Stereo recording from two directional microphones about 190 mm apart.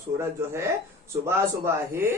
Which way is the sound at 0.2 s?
15° right (ahead or behind).